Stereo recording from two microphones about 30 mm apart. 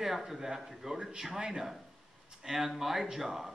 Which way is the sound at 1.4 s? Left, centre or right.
Right.